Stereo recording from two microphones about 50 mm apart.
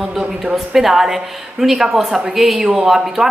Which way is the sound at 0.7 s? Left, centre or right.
Centre.